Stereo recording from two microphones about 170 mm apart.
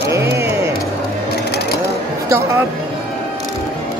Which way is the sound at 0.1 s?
15° right (ahead or behind).